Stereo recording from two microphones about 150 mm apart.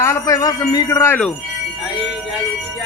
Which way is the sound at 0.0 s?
20° left (ahead or behind).